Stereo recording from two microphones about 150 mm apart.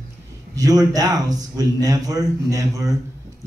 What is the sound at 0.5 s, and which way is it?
Speech, 25° right (ahead or behind).